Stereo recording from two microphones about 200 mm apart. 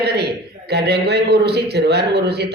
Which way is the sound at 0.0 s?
55° right (ahead or behind).